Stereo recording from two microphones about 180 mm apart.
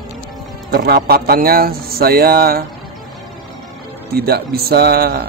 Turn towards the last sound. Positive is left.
turn(degrees=-60)  # may be behind; listen again after turning